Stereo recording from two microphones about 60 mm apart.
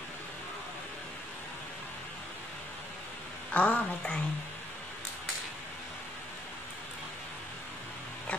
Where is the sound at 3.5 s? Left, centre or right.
Left.